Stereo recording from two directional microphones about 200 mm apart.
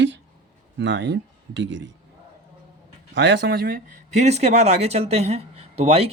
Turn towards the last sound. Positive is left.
turn(degrees=-30)  # may be behind; listen again after turning